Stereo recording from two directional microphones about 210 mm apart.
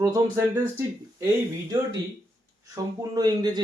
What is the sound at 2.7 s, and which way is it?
Speech, 20° right (ahead or behind).